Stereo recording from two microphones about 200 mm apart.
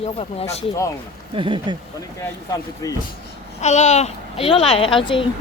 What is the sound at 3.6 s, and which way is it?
A child's voice, 35° left (ahead or behind).